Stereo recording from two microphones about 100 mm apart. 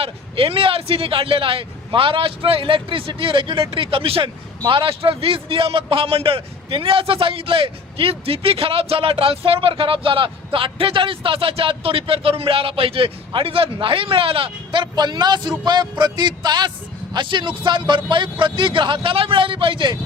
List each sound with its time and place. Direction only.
0.0 s a man's voice: 70° right (ahead or behind)